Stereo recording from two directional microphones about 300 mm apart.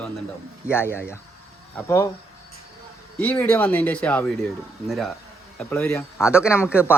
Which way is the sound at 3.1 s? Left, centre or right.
Centre.